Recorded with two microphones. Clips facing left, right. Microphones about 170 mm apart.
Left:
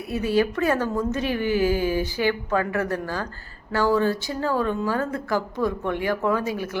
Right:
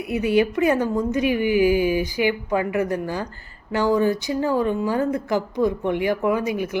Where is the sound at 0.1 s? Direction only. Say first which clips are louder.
Right 2 dB; 15° right (ahead or behind).